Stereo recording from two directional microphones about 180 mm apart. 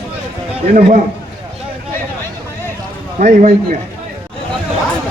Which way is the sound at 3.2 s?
40° right (ahead or behind).